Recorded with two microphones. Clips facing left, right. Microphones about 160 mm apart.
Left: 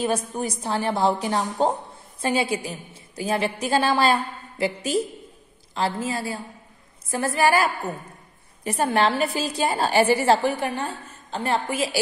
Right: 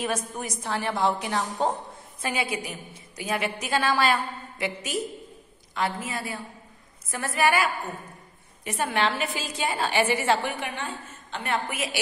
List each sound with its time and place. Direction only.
0.0 s a woman's voice: 30° left (ahead or behind)